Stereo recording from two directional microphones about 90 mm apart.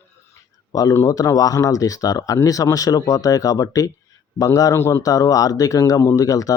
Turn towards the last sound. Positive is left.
turn(degrees=40)  # may be behind; listen again after turning